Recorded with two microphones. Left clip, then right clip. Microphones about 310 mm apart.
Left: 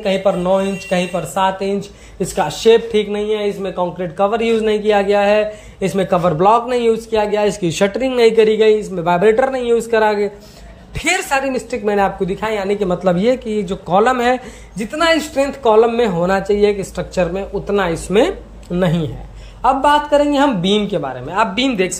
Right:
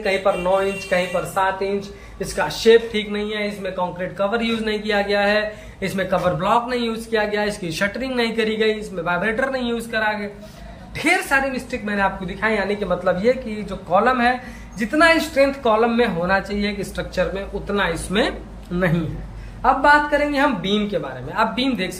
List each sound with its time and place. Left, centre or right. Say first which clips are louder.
0.0 s speech: left 3 dB; left
19.6 s speech: left 2 dB; left